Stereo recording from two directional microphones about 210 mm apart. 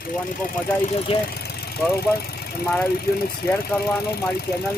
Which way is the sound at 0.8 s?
30° left (ahead or behind).